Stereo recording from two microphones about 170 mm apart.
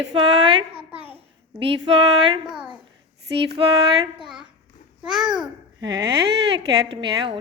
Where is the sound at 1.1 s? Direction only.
30° right (ahead or behind).